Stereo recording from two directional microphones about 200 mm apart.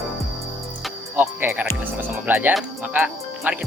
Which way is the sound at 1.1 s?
10° right (ahead or behind).